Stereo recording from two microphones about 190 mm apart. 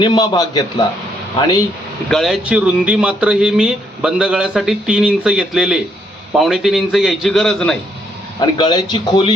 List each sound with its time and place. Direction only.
0.0 s speech: 20° left (ahead or behind)
2.0 s speech: centre (ahead or behind)
8.4 s speech: 25° left (ahead or behind)